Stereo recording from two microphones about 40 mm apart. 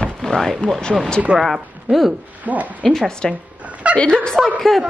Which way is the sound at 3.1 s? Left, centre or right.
Centre.